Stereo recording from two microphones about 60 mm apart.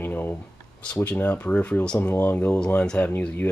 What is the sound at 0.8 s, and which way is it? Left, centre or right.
Speech, left.